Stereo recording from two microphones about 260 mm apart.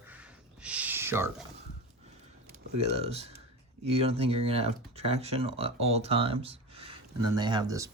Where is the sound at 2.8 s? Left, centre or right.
Right.